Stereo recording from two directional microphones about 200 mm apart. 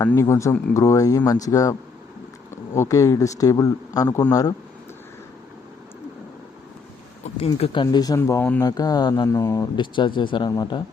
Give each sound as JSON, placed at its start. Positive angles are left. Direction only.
{"t": 0.1, "sound": "a man's voice", "side_deg": 15}
{"t": 2.7, "sound": "a man's voice", "side_deg": 15}
{"t": 7.3, "sound": "speech", "side_deg": 30}